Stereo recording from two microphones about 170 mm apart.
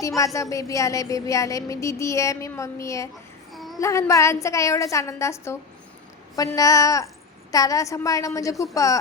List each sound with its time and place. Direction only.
0.5 s child singing: 20° left (ahead or behind)
3.5 s a sound: centre (ahead or behind)
3.8 s a woman's voice: 15° left (ahead or behind)
6.3 s child singing: 20° left (ahead or behind)